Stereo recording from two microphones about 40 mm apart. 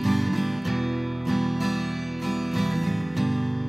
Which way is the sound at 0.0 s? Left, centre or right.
Centre.